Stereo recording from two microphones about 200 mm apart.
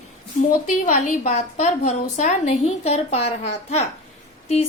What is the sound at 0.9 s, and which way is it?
A woman's voice, 40° left (ahead or behind).